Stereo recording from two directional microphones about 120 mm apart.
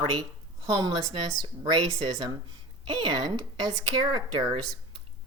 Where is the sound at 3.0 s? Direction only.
35° right (ahead or behind).